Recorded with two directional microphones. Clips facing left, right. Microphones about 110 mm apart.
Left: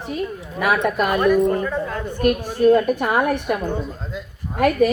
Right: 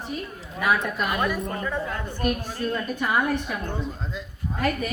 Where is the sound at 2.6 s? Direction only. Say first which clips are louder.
Left 12 dB; 60° left (ahead or behind).